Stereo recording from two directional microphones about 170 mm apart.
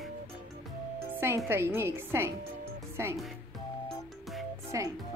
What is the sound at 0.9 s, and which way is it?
A woman's voice, 15° right (ahead or behind).